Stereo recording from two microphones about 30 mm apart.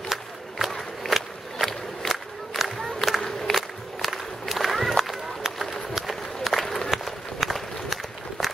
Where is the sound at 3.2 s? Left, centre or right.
Centre.